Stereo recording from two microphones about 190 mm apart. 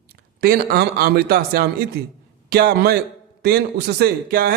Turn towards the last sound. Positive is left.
turn(degrees=-50)  # may be behind; listen again after turning